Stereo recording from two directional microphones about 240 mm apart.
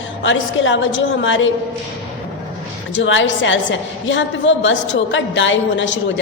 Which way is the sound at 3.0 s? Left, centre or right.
Left.